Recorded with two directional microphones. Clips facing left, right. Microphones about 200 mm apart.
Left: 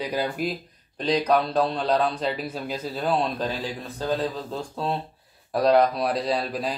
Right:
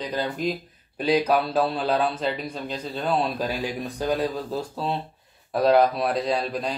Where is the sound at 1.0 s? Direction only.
10° right (ahead or behind).